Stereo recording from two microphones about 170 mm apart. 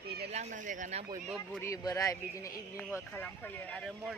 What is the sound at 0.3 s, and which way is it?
Speech, 45° right (ahead or behind).